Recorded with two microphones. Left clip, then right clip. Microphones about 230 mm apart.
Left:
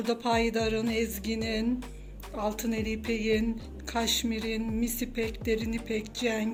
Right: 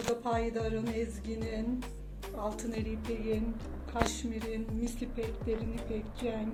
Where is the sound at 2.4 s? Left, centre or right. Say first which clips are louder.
Left 6 dB; left.